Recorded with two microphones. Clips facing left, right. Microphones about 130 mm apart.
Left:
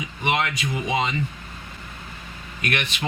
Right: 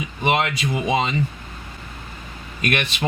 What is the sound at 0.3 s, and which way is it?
Speech, 30° right (ahead or behind).